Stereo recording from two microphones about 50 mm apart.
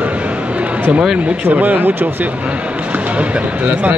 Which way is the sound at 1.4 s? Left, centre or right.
Right.